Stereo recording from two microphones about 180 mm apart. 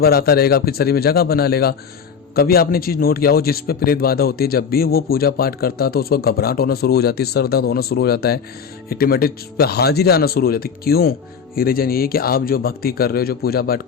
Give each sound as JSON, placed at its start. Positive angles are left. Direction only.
{"t": 0.0, "sound": "a man's voice", "side_deg": 60}